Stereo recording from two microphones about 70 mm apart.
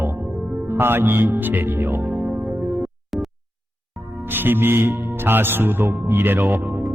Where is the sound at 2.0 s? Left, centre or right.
Centre.